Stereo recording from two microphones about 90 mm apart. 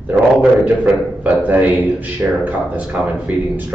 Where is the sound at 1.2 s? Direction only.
15° right (ahead or behind).